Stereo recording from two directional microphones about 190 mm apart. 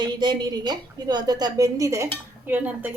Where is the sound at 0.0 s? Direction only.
20° right (ahead or behind).